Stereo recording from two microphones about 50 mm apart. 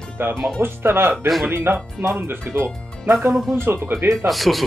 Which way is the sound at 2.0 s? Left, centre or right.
Right.